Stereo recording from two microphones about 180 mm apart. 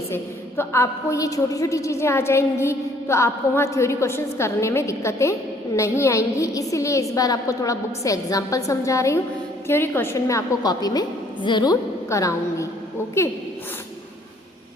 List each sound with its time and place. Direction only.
0.1 s a woman's voice: 15° left (ahead or behind)